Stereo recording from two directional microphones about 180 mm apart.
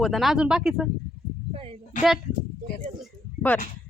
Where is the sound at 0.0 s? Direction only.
Centre (ahead or behind).